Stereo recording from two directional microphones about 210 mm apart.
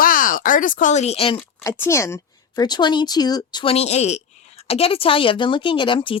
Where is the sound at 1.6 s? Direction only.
10° left (ahead or behind).